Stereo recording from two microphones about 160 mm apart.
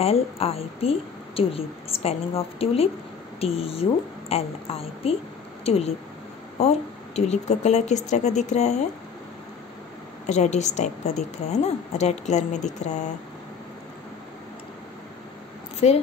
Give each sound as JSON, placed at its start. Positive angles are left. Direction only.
{"t": 0.0, "sound": "a woman's voice", "side_deg": 40}
{"t": 7.2, "sound": "a woman's voice", "side_deg": 45}
{"t": 10.2, "sound": "a woman's voice", "side_deg": 45}
{"t": 15.8, "sound": "a woman's voice", "side_deg": 45}